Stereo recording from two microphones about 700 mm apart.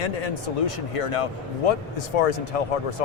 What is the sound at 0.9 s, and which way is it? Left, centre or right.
A man's voice, left.